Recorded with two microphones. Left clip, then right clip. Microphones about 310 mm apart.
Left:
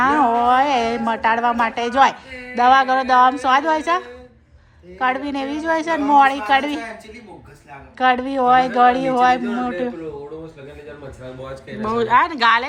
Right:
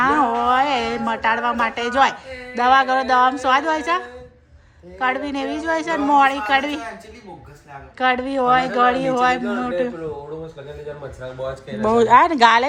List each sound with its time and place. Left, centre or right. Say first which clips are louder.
0.0 s a sound: left 2 dB; centre
2.6 s a woman's voice: left 2 dB; centre
7.9 s a woman's voice: left 2 dB; centre
11.8 s speech: right 3 dB; centre